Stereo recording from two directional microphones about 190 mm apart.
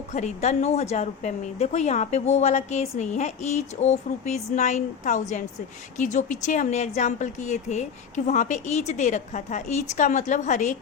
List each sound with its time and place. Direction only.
0.1 s a woman's voice: 40° left (ahead or behind)